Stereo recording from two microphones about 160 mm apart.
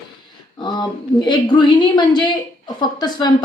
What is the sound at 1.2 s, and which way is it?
Speech, 25° left (ahead or behind).